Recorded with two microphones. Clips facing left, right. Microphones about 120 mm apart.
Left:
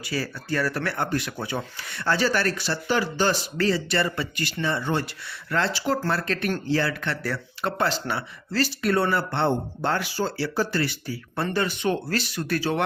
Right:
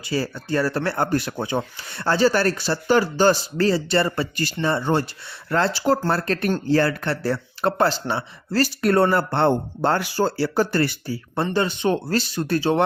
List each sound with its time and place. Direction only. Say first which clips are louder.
0.1 s speech: right 5 dB; 30° right (ahead or behind)
1.4 s speech: right 5 dB; 25° right (ahead or behind)
8.5 s speech: right 5 dB; 45° right (ahead or behind)
11.0 s speech: right 4 dB; 30° right (ahead or behind)